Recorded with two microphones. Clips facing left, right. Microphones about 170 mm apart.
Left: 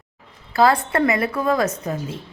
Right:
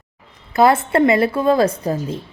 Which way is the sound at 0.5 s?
20° right (ahead or behind).